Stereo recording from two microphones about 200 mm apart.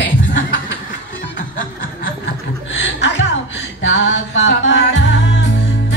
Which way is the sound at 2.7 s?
65° left (ahead or behind).